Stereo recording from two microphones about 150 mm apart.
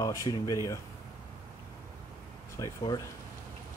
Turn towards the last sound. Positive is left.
turn(degrees=25)  # may be behind; listen again after turning